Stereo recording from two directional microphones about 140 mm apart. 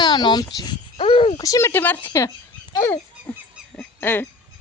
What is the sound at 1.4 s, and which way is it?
Speech, 25° left (ahead or behind).